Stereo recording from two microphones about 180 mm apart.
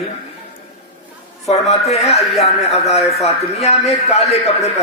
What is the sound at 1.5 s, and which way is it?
A man's voice, 35° left (ahead or behind).